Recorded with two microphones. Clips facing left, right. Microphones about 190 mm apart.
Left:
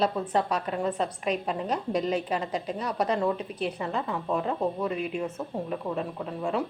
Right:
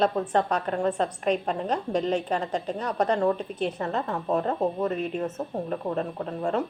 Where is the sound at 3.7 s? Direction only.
40° right (ahead or behind).